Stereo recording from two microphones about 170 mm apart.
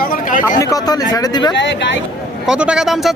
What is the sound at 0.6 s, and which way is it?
Speech, 20° left (ahead or behind).